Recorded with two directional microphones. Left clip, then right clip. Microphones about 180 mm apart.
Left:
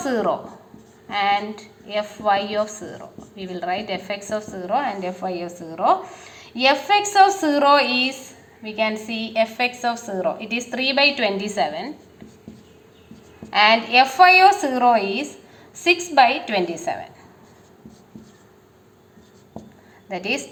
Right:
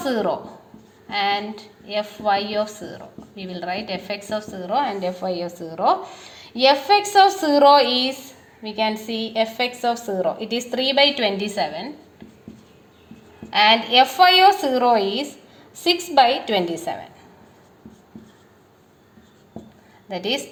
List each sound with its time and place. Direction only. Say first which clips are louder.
0.0 s a woman's voice: left 1 dB; 35° right (ahead or behind)
14.0 s a woman's voice: left 2 dB; 40° right (ahead or behind)